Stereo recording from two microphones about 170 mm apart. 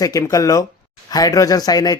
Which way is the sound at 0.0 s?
20° left (ahead or behind).